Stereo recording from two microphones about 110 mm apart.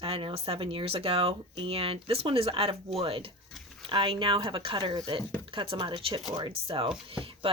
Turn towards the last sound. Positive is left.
turn(degrees=-55)  # may be behind; listen again after turning